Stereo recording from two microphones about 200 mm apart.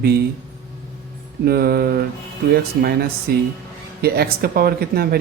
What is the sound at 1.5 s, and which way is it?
Speech, 50° right (ahead or behind).